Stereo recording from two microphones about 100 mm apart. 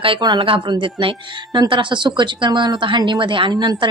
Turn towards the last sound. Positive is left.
turn(degrees=-45)  # may be behind; listen again after turning